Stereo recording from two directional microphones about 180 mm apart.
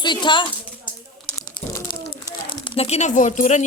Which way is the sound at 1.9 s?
25° left (ahead or behind).